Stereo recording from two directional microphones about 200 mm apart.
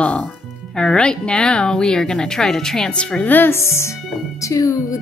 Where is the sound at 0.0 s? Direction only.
5° left (ahead or behind).